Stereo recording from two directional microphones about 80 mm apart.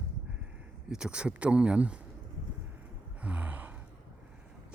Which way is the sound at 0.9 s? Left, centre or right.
Centre.